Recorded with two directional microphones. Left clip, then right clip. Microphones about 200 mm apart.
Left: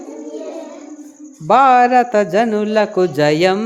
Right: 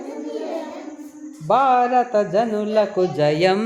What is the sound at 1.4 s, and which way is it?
A man's voice, 40° left (ahead or behind).